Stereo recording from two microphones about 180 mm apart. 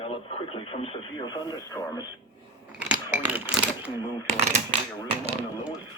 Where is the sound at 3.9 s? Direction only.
20° left (ahead or behind).